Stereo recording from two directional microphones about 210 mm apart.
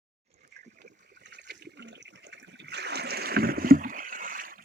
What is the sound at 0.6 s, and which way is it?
Toilet flush, 50° right (ahead or behind).